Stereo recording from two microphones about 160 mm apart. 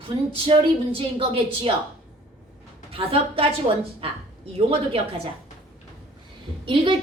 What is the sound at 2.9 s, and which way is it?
Speech, 35° right (ahead or behind).